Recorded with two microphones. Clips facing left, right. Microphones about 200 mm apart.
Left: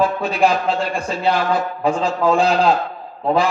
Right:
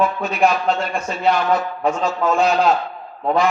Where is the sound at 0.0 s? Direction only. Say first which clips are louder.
Left 1 dB; 30° left (ahead or behind).